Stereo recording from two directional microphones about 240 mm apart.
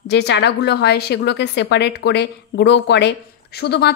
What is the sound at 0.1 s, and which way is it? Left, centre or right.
A woman's voice, left.